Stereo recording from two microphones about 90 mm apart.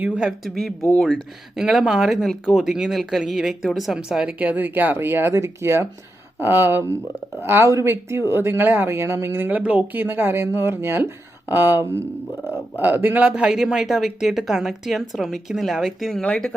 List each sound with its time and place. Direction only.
0.0 s a woman's voice: 10° right (ahead or behind)
13.5 s speech: 5° right (ahead or behind)
16.2 s speech: 15° left (ahead or behind)